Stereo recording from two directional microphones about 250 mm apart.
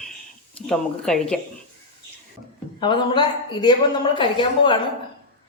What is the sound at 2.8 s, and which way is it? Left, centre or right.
Speech, centre.